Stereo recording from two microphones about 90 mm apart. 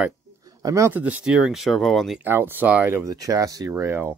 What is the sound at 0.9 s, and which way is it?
Speech, 20° right (ahead or behind).